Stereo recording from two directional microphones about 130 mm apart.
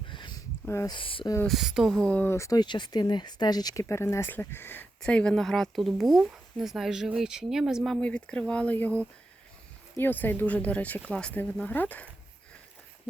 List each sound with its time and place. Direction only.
0.1 s a sound: 35° left (ahead or behind)
0.9 s speech: 40° left (ahead or behind)
1.5 s speech: 5° right (ahead or behind)
8.0 s speech: 10° left (ahead or behind)
10.0 s speech: 15° left (ahead or behind)